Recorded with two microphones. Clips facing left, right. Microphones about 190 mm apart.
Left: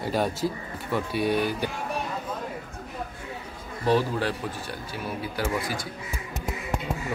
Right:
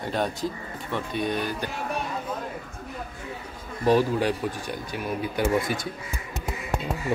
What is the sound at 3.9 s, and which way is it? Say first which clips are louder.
Speech: right 3 dB; 15° right (ahead or behind).